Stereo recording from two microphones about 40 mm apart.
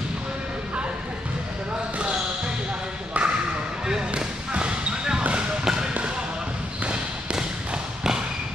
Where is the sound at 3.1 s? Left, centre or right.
Right.